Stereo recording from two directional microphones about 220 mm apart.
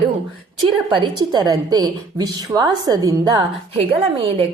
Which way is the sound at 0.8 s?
20° right (ahead or behind).